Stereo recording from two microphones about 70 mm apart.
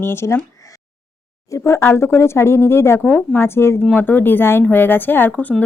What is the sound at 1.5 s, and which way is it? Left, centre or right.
Speech, left.